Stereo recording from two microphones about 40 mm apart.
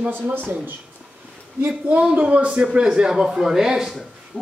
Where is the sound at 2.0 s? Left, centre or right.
Right.